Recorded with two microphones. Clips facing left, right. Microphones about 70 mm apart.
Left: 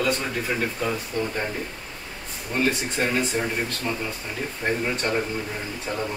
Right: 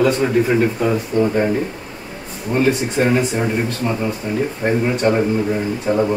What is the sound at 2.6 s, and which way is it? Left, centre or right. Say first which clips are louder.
Speech: right 7 dB; centre.